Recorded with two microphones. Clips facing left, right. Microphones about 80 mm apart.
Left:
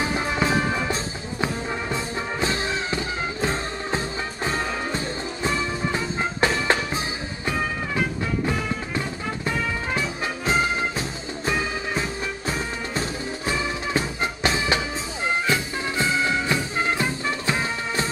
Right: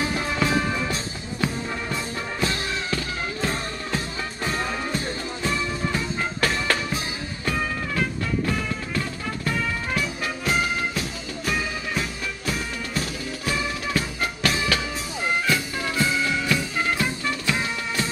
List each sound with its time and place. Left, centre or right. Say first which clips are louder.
0.0 s music: left 1 dB; centre
7.4 s music: even; centre